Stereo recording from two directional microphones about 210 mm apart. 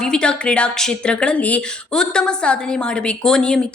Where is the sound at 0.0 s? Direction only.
5° left (ahead or behind).